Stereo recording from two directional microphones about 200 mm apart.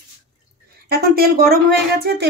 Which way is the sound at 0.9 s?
50° right (ahead or behind).